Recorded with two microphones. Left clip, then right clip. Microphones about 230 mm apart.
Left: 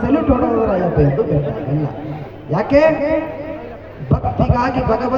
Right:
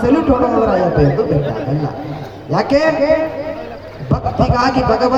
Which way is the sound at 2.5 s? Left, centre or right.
Right.